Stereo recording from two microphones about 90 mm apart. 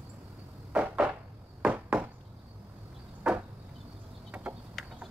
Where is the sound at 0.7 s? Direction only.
10° right (ahead or behind).